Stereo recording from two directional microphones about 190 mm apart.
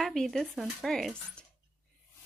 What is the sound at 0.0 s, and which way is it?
Speech, centre (ahead or behind).